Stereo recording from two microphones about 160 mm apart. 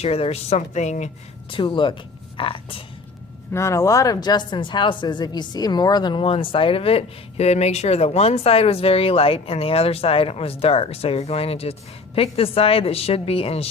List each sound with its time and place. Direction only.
0.0 s speech: 40° left (ahead or behind)
1.5 s speech: 30° left (ahead or behind)
3.5 s speech: 20° left (ahead or behind); by 13.7 s 40° left (ahead or behind)